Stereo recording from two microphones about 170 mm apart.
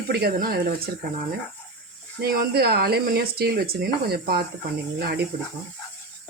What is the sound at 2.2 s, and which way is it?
Speech, 65° right (ahead or behind).